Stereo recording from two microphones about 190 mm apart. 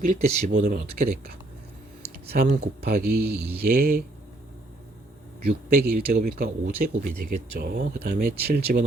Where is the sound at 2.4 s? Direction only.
45° right (ahead or behind).